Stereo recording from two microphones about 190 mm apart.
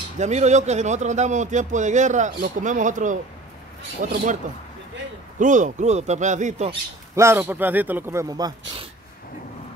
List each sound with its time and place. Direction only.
0.2 s a man's voice: 35° right (ahead or behind)
5.4 s speech: 40° right (ahead or behind)
7.2 s speech: 10° right (ahead or behind)